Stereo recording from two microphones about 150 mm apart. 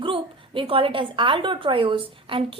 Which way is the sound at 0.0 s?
35° right (ahead or behind).